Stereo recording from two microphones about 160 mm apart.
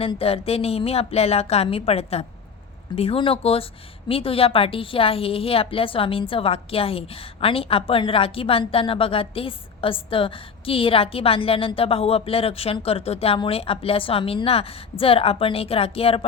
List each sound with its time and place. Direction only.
0.0 s a woman's voice: 35° left (ahead or behind)